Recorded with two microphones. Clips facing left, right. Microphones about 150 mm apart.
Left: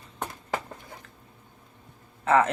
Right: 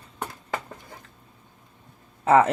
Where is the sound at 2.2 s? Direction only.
35° right (ahead or behind).